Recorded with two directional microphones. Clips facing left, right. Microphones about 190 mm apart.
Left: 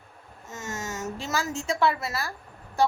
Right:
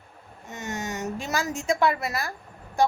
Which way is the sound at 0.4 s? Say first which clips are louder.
Right 2 dB; 15° right (ahead or behind).